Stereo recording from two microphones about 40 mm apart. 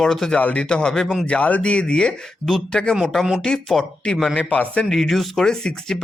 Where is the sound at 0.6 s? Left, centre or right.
Left.